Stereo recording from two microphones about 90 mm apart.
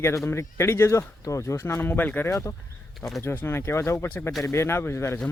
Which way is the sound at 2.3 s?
35° left (ahead or behind).